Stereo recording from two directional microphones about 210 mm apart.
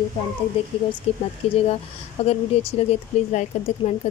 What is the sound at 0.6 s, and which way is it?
Speech, 25° left (ahead or behind).